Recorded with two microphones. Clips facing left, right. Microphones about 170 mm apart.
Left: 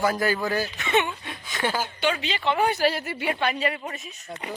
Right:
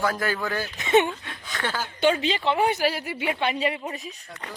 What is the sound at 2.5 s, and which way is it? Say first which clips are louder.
Speech: left 1 dB; 25° right (ahead or behind).